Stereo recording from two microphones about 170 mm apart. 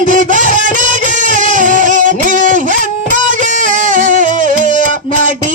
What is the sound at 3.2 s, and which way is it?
Music, 50° right (ahead or behind).